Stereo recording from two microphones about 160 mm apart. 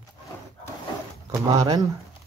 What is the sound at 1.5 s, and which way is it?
Speech, 25° right (ahead or behind).